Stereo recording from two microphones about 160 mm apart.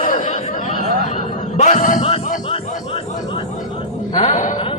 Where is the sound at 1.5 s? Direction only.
50° left (ahead or behind).